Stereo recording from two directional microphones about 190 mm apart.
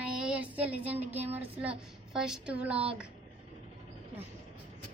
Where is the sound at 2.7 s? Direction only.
30° right (ahead or behind).